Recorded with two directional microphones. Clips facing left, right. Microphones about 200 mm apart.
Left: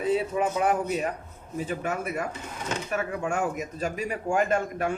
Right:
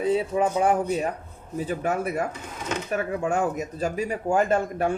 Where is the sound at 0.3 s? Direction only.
30° right (ahead or behind).